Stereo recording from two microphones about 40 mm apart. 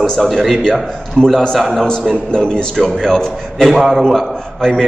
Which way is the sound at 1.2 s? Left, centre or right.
Centre.